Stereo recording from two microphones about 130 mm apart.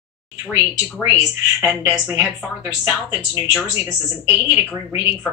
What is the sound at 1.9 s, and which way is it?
Speech, 15° right (ahead or behind).